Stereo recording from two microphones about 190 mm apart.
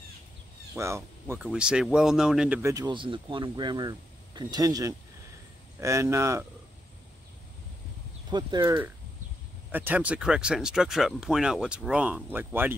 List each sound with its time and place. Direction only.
0.7 s speech: 15° right (ahead or behind)
2.6 s speech: 20° right (ahead or behind)
8.3 s speech: 20° right (ahead or behind)
9.7 s speech: 10° right (ahead or behind)